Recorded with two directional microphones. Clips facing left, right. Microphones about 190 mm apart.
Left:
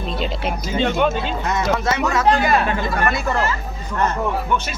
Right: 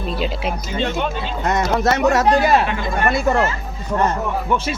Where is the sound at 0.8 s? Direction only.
50° left (ahead or behind).